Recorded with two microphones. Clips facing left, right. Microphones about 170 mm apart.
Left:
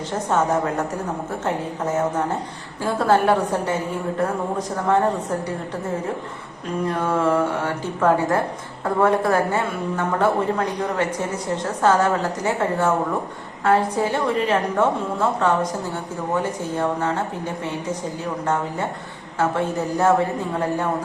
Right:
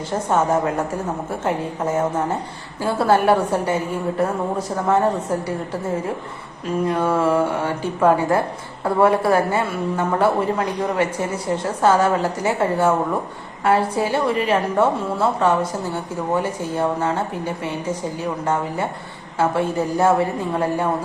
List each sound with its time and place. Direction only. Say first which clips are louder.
0.1 s a woman's voice: right 2 dB; 10° right (ahead or behind)
6.8 s a woman's voice: right 2 dB; 10° right (ahead or behind)
19.4 s a woman's voice: right 2 dB; 10° right (ahead or behind)